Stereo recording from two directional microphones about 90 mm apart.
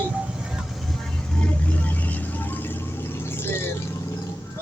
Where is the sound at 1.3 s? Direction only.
10° left (ahead or behind).